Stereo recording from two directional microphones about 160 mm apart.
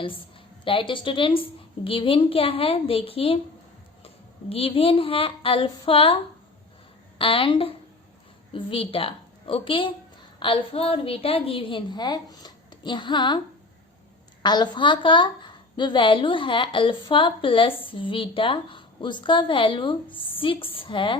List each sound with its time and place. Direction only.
0.0 s a woman's voice: 30° left (ahead or behind)
7.2 s a woman's voice: 35° left (ahead or behind)
14.4 s a woman's voice: 25° left (ahead or behind)